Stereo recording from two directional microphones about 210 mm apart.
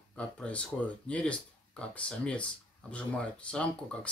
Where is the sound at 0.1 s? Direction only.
5° left (ahead or behind).